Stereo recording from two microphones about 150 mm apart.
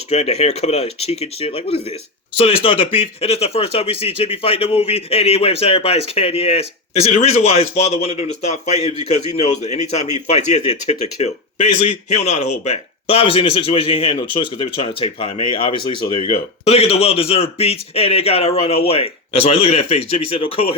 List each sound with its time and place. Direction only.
0.1 s speech: 45° left (ahead or behind)